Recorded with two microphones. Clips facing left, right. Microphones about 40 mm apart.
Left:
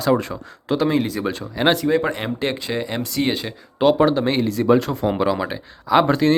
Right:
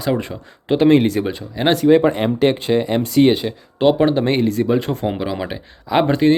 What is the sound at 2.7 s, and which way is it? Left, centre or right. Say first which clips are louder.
Speech: right 7 dB; centre.